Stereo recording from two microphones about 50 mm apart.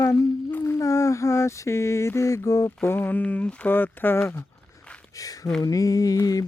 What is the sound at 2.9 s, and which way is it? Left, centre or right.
Speech, left.